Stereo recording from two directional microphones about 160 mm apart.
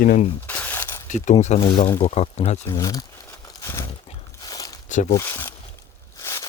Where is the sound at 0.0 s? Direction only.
55° left (ahead or behind).